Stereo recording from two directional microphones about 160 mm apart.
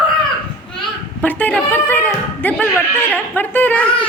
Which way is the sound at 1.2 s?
10° left (ahead or behind).